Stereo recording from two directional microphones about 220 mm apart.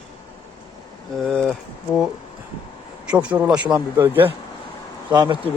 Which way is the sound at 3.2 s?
5° right (ahead or behind).